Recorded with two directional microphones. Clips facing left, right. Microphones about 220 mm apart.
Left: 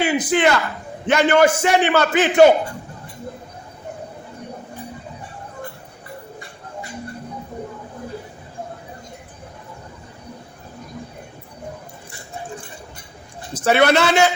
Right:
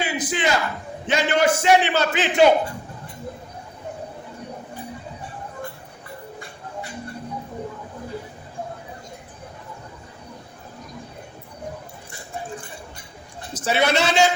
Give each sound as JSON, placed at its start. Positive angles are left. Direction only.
{"t": 0.0, "sound": "a man's voice", "side_deg": 60}
{"t": 13.7, "sound": "a man's voice", "side_deg": 60}